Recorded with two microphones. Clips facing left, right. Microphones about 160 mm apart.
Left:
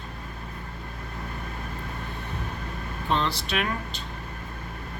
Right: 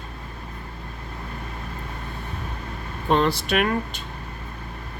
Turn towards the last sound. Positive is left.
turn(degrees=-50)  # may be behind; listen again after turning